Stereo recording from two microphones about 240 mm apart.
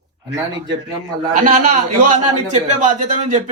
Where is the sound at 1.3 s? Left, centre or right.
Right.